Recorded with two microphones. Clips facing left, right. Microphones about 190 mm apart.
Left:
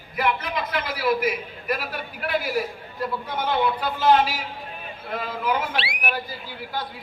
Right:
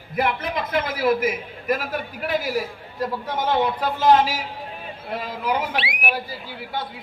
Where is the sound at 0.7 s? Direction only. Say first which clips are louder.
Right 4 dB; 45° right (ahead or behind).